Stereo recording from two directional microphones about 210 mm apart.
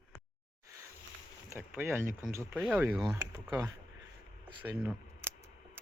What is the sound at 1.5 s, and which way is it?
Speech, 10° right (ahead or behind).